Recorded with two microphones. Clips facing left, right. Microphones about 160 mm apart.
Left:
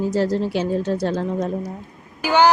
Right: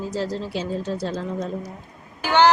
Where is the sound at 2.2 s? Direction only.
10° left (ahead or behind).